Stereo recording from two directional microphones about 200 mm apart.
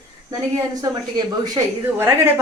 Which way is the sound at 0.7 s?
20° right (ahead or behind).